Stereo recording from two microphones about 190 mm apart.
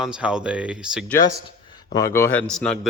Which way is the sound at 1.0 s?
15° left (ahead or behind).